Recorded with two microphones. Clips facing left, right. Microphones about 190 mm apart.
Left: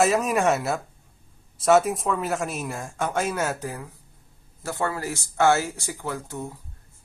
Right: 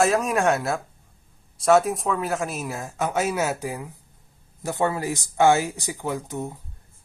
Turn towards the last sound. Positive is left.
turn(degrees=-20)  # may be behind; listen again after turning